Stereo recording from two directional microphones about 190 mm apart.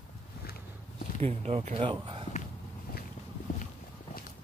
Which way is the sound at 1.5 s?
35° right (ahead or behind).